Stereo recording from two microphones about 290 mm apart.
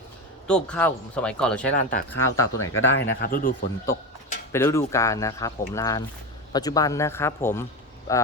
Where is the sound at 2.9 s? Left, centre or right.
Left.